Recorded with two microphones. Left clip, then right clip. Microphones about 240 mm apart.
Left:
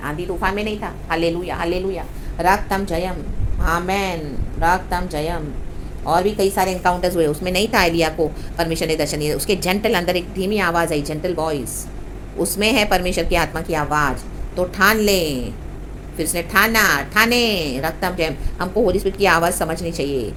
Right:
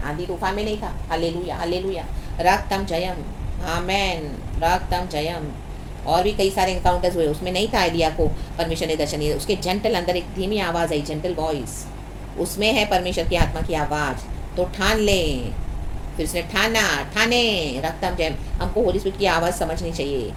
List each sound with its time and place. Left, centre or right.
0.0 s a woman's voice: left